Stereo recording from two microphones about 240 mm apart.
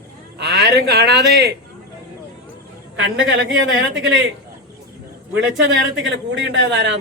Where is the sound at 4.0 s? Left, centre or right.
Right.